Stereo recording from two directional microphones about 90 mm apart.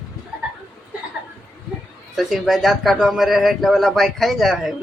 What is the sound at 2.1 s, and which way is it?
Speech, centre (ahead or behind).